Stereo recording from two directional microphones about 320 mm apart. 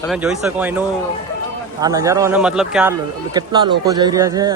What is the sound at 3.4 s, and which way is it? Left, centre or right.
A man's voice, centre.